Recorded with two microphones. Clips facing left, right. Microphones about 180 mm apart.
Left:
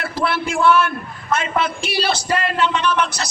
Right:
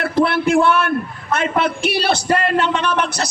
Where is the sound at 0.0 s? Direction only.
60° right (ahead or behind).